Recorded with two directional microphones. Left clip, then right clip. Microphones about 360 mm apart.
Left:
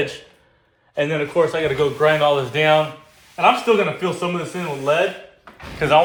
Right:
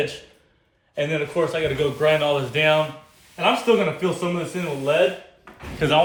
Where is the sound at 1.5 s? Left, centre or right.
Centre.